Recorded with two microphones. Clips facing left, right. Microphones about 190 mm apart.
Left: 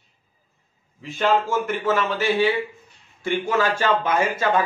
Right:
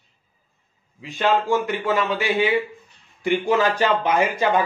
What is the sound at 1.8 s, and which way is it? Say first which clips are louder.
Speech: even; 15° right (ahead or behind).